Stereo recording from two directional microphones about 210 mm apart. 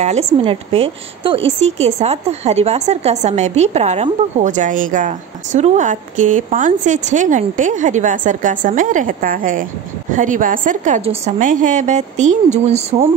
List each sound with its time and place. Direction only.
0.0 s a woman's voice: 30° right (ahead or behind)